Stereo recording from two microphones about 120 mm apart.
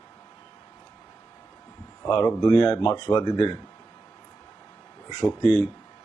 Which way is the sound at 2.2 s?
35° left (ahead or behind).